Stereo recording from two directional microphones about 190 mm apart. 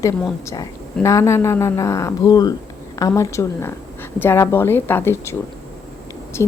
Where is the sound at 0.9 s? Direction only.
15° left (ahead or behind).